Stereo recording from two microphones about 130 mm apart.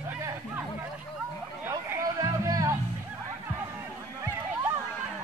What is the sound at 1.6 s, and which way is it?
Chatter, 20° right (ahead or behind).